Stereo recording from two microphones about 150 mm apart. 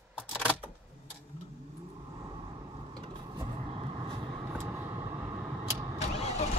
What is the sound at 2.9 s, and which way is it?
Vehicle, 30° right (ahead or behind).